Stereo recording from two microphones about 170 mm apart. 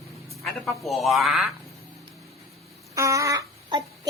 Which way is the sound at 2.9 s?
20° right (ahead or behind).